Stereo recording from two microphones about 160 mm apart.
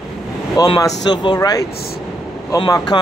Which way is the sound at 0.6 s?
25° left (ahead or behind).